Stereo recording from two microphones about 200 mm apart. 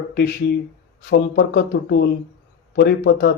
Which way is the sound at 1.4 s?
60° left (ahead or behind).